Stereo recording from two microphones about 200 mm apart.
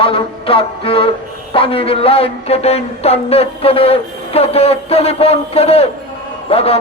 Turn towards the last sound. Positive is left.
turn(degrees=30)  # may be behind; listen again after turning